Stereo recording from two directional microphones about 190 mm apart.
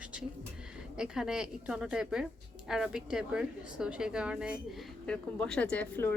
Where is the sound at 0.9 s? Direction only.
5° right (ahead or behind).